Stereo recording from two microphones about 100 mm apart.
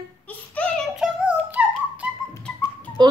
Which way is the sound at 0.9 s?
5° right (ahead or behind).